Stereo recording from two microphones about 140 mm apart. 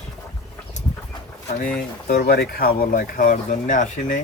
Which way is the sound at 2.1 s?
90° left.